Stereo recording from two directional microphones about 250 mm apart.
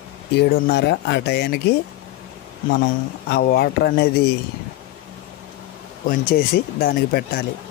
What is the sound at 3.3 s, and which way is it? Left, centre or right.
Speech, left.